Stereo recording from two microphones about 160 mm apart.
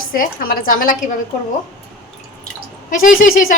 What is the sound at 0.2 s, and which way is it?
Speech, 60° left (ahead or behind).